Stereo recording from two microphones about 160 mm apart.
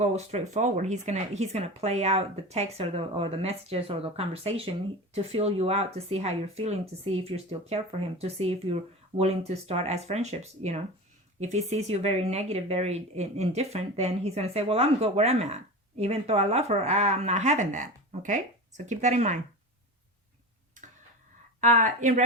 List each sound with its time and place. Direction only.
0.0 s speech: 45° right (ahead or behind)
21.6 s speech: 50° right (ahead or behind)